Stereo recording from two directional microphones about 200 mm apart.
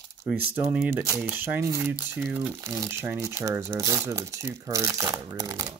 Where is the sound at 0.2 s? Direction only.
10° right (ahead or behind).